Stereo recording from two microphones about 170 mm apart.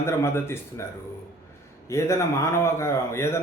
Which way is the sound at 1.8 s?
15° left (ahead or behind).